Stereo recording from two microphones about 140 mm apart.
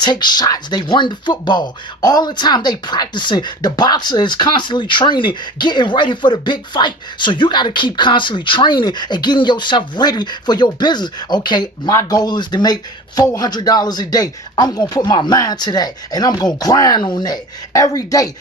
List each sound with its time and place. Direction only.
0.0 s speech: 30° left (ahead or behind)